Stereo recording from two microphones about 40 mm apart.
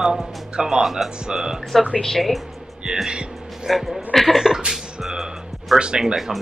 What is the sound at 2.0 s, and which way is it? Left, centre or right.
Speech, centre.